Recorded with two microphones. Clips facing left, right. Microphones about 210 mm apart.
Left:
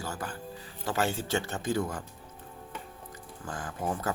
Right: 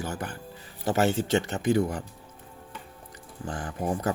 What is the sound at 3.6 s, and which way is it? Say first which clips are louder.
Speech: right 3 dB; 20° right (ahead or behind).